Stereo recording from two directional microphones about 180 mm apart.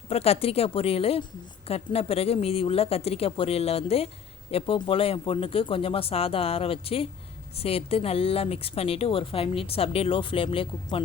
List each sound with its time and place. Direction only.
0.1 s a woman's voice: 35° left (ahead or behind)